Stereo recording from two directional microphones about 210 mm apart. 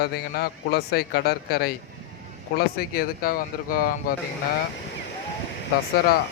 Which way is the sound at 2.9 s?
45° left (ahead or behind).